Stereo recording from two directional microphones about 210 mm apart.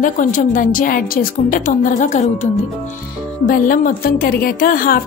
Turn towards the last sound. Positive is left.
turn(degrees=40)  # may be behind; listen again after turning